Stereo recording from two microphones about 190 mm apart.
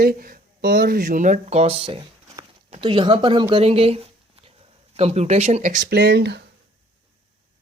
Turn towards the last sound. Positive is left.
turn(degrees=-60)  # may be behind; listen again after turning